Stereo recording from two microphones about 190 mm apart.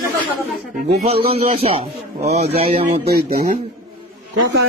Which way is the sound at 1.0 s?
30° right (ahead or behind).